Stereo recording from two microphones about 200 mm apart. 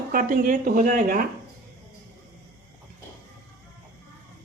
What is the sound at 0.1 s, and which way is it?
Speech, 40° right (ahead or behind).